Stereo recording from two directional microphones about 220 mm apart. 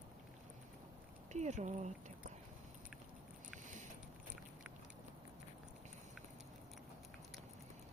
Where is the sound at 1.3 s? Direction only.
30° right (ahead or behind).